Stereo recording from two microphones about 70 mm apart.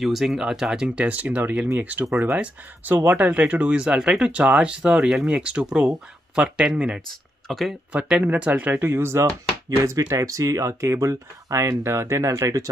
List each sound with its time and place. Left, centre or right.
0.0 s speech: centre
7.4 s speech: centre
8.2 s speech: right
8.8 s speech: right